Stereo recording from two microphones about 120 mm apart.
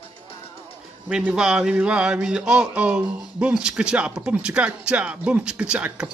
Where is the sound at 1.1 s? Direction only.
5° right (ahead or behind).